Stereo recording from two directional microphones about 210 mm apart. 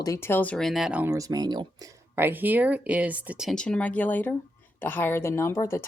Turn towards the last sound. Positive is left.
turn(degrees=15)  # may be behind; listen again after turning